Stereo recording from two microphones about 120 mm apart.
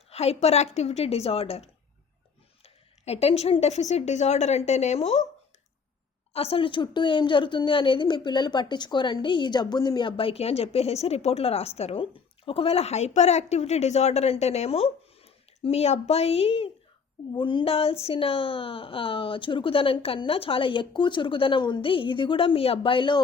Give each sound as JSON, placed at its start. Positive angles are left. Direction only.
{"t": 0.1, "sound": "a woman's voice", "side_deg": 60}
{"t": 6.3, "sound": "a woman's voice", "side_deg": 55}
{"t": 17.3, "sound": "speech", "side_deg": 40}